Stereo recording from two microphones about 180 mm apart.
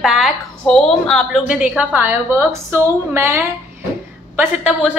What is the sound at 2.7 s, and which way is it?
A woman's voice, 15° right (ahead or behind).